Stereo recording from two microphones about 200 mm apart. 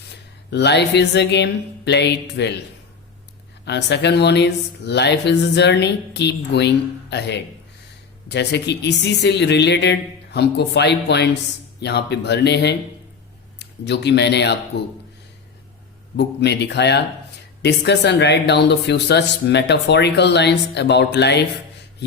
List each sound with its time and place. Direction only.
0.5 s speech: 60° left (ahead or behind)
3.7 s speech: 55° left (ahead or behind)
16.1 s speech: 55° left (ahead or behind)